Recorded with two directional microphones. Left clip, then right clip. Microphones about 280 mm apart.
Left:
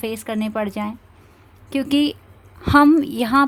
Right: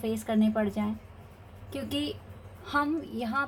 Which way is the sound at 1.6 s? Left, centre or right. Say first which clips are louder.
Left 13 dB; left.